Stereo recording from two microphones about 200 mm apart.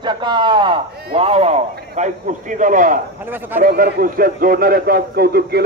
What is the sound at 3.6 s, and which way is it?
A man's voice, 45° right (ahead or behind).